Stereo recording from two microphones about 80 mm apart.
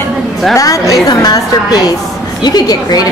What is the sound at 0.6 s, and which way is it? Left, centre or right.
A woman's voice, left.